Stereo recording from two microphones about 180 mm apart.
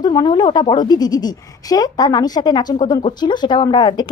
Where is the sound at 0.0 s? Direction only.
25° left (ahead or behind).